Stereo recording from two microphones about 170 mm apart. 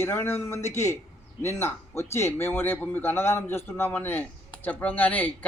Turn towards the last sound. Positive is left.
turn(degrees=10)  # may be behind; listen again after turning